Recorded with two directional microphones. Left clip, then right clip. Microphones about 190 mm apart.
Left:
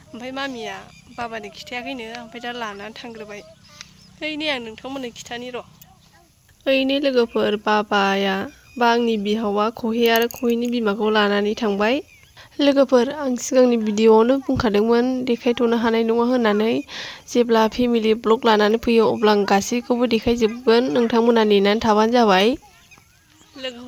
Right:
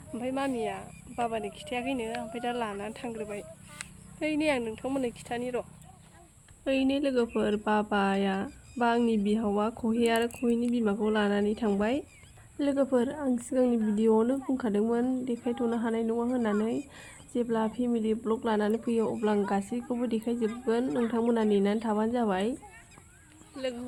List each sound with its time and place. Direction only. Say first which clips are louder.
0.1 s speech: left 3 dB; 5° left (ahead or behind)
6.7 s a woman's voice: left 9 dB; 55° left (ahead or behind)
23.6 s speech: left 4 dB; 5° left (ahead or behind)